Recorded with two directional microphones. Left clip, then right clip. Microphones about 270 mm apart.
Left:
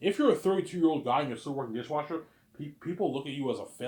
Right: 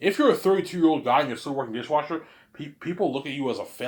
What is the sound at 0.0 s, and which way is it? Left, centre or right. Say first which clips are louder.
Speech: right 5 dB; centre.